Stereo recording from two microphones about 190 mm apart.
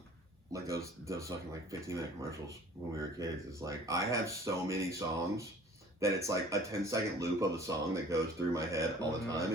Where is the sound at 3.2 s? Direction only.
15° right (ahead or behind).